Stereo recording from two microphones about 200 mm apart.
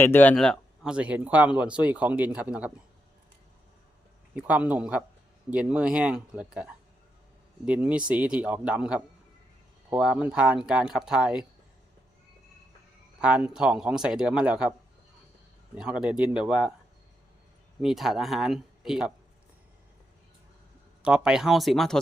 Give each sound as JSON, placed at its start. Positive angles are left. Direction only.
{"t": 0.0, "sound": "speech", "side_deg": 10}
{"t": 4.4, "sound": "a man's voice", "side_deg": -5}
{"t": 13.2, "sound": "speech", "side_deg": -5}
{"t": 15.7, "sound": "speech", "side_deg": -5}
{"t": 17.7, "sound": "speech", "side_deg": 0}
{"t": 21.0, "sound": "speech", "side_deg": -5}